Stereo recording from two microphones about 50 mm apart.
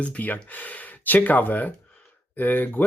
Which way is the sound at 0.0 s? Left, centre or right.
Left.